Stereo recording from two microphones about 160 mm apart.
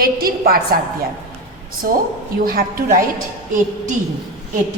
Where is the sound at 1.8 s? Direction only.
60° right (ahead or behind).